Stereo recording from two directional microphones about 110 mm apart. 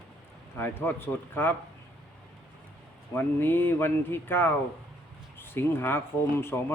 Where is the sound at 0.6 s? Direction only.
20° left (ahead or behind).